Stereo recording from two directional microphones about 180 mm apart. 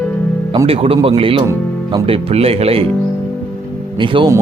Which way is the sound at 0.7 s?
30° right (ahead or behind).